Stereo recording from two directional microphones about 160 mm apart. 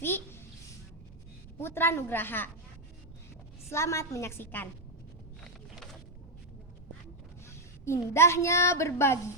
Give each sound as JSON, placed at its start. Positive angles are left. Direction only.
{"t": 0.0, "sound": "a child's voice", "side_deg": 15}
{"t": 1.5, "sound": "a woman's voice", "side_deg": 15}
{"t": 3.7, "sound": "a woman's voice", "side_deg": 15}
{"t": 5.4, "sound": "vehicle", "side_deg": 0}
{"t": 7.4, "sound": "a woman's voice", "side_deg": 15}